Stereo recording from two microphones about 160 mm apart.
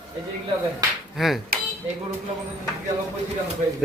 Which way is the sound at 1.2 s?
Centre (ahead or behind).